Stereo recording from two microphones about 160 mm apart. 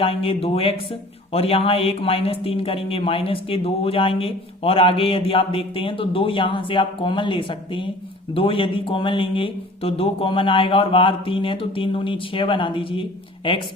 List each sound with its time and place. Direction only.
0.0 s speech: 35° left (ahead or behind)